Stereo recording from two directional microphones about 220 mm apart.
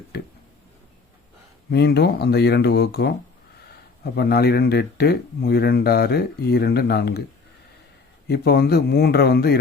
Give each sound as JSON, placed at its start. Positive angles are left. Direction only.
{"t": 1.7, "sound": "speech", "side_deg": 50}
{"t": 8.3, "sound": "speech", "side_deg": 45}